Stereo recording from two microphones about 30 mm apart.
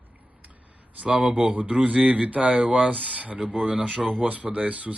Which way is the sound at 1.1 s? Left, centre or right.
Centre.